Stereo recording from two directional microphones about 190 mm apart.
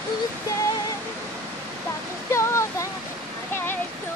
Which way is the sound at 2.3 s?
15° left (ahead or behind).